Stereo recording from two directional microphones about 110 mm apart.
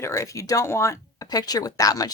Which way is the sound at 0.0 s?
30° left (ahead or behind).